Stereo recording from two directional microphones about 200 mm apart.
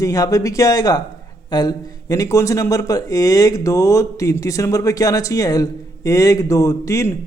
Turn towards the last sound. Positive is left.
turn(degrees=15)  # may be behind; listen again after turning